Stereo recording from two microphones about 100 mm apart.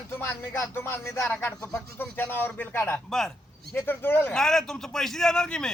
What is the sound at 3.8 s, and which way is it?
Speech, 20° left (ahead or behind).